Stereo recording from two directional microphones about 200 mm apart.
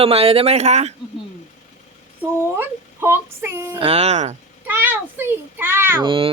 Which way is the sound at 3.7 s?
30° right (ahead or behind).